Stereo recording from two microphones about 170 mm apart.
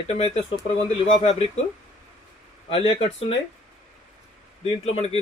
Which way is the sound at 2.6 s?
35° left (ahead or behind).